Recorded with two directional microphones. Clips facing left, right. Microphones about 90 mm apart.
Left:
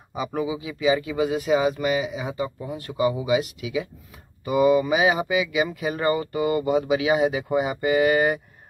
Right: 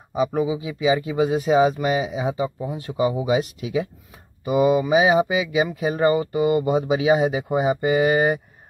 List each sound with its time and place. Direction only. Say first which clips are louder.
0.4 s speech: right 4 dB; 25° right (ahead or behind)
3.3 s speech: right 1 dB; 35° right (ahead or behind)
4.5 s speech: right 1 dB; 20° right (ahead or behind)